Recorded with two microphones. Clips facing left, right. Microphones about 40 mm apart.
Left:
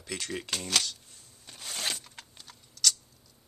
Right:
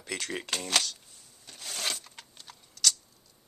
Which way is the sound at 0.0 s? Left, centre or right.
Centre.